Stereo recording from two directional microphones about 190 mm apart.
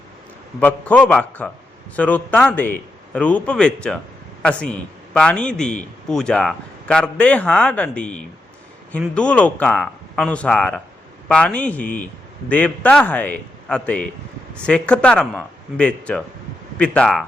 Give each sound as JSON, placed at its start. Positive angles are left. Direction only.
{"t": 0.6, "sound": "a man's voice", "side_deg": 5}